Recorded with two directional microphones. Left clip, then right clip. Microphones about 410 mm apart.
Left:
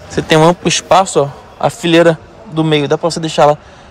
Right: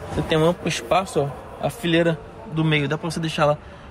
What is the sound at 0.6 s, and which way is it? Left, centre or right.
A man's voice, centre.